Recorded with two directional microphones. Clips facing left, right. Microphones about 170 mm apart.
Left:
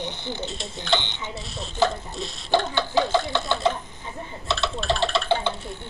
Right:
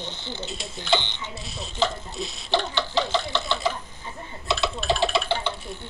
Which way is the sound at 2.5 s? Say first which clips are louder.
Left 3 dB; 15° left (ahead or behind).